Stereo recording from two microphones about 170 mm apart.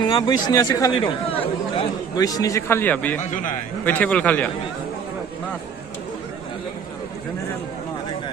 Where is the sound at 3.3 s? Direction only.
50° left (ahead or behind).